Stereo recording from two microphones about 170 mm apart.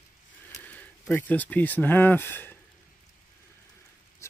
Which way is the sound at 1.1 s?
10° left (ahead or behind).